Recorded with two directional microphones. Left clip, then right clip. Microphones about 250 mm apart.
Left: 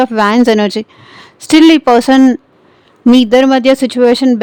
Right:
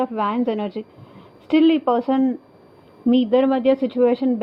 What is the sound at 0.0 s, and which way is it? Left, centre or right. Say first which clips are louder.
Speech: left 12 dB; left.